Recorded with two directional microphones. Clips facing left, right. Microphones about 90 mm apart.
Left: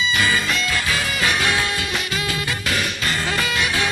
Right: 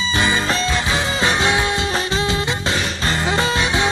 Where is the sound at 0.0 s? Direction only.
30° right (ahead or behind).